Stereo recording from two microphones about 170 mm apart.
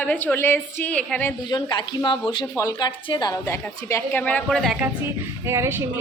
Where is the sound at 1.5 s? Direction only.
30° left (ahead or behind); by 4.7 s 5° left (ahead or behind).